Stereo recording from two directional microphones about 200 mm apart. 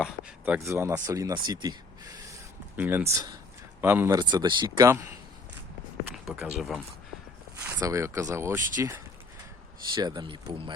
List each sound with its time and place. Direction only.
0.0 s speech: 5° right (ahead or behind)
2.7 s speech: 10° right (ahead or behind)
6.2 s speech: 5° right (ahead or behind)
7.6 s speech: 15° right (ahead or behind)
9.9 s speech: 20° right (ahead or behind)